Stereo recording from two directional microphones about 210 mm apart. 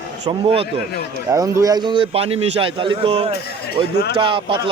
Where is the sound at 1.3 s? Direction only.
15° right (ahead or behind).